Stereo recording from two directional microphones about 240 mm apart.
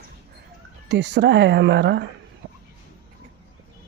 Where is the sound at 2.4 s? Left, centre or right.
Right.